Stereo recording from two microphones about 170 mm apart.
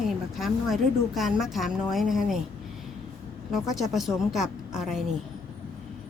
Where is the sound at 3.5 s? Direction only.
Centre (ahead or behind).